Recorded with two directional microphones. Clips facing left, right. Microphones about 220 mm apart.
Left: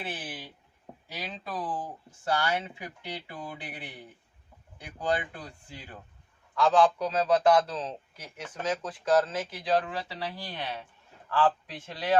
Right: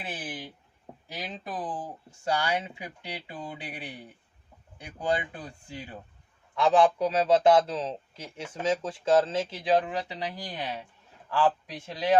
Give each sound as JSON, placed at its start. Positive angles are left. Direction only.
{"t": 0.0, "sound": "speech", "side_deg": -15}
{"t": 4.9, "sound": "speech", "side_deg": -15}